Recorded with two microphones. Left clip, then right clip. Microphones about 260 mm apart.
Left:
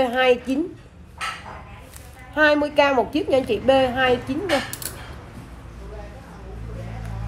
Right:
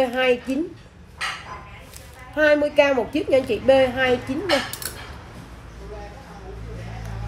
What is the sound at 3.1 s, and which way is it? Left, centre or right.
Speech, left.